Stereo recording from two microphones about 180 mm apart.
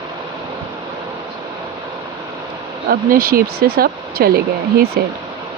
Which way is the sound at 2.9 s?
55° right (ahead or behind).